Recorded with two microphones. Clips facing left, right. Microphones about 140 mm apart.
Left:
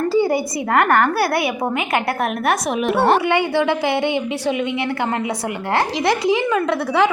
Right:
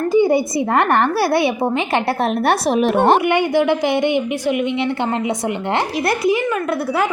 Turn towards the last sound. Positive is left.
turn(degrees=90)